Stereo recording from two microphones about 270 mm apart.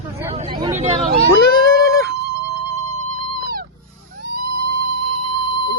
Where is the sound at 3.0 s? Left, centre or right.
Right.